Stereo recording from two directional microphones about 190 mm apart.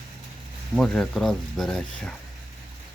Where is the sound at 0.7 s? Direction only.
Centre (ahead or behind).